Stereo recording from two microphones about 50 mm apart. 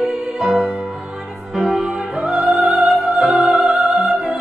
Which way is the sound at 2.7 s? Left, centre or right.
Centre.